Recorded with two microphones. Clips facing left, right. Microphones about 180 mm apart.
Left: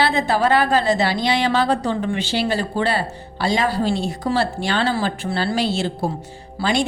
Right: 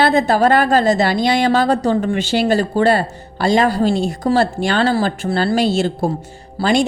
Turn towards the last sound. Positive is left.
turn(degrees=-45)  # may be behind; listen again after turning